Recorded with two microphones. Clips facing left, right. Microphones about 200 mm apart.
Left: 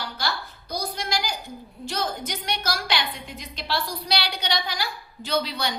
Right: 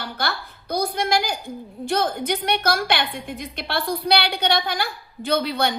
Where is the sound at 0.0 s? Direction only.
55° right (ahead or behind).